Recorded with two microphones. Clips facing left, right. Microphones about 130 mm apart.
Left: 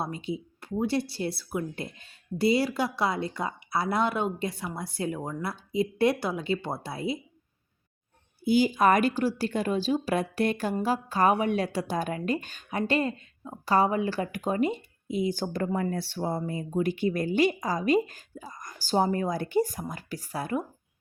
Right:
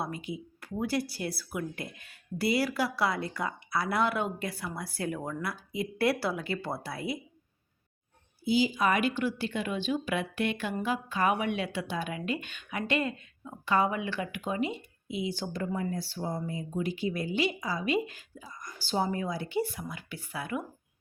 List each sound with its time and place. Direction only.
0.0 s speech: 25° left (ahead or behind)
8.4 s speech: 50° left (ahead or behind)